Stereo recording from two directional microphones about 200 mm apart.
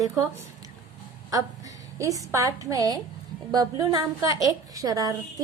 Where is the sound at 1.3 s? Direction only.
15° right (ahead or behind).